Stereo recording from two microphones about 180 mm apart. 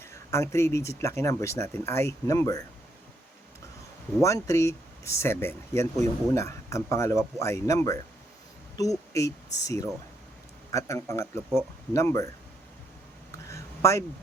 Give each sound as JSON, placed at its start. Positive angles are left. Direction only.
{"t": 0.0, "sound": "speech", "side_deg": 15}
{"t": 4.2, "sound": "speech", "side_deg": 15}
{"t": 13.3, "sound": "a sound", "side_deg": 15}